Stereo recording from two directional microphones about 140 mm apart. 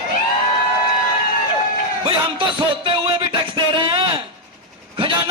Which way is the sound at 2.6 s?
40° right (ahead or behind).